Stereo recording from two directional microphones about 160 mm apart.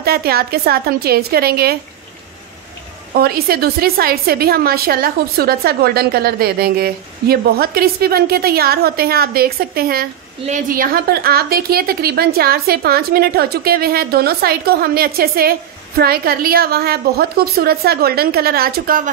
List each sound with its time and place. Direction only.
0.0 s a woman's voice: 75° right (ahead or behind)
3.2 s a woman's voice: 75° right (ahead or behind)
10.4 s a woman's voice: 55° right (ahead or behind)